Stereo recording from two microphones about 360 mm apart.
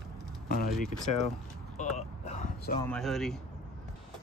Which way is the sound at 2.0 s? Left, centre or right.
Centre.